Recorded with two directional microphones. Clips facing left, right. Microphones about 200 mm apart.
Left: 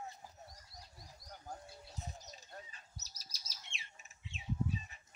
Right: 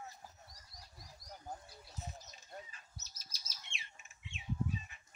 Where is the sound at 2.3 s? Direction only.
35° left (ahead or behind).